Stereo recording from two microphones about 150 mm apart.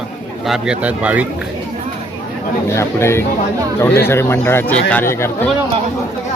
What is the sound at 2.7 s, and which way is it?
Speech, 15° left (ahead or behind).